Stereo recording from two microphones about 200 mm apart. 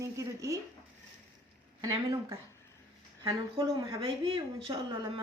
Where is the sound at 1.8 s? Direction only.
20° right (ahead or behind).